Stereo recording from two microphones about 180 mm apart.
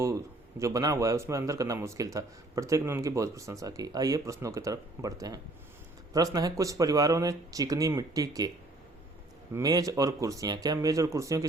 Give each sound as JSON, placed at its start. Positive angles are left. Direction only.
{"t": 0.6, "sound": "speech", "side_deg": -20}
{"t": 9.5, "sound": "speech", "side_deg": -20}